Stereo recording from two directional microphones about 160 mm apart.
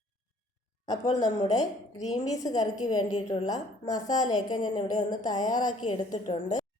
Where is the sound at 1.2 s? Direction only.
25° left (ahead or behind).